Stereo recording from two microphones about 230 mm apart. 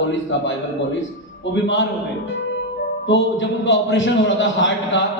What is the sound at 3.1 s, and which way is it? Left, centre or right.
A man's voice, left.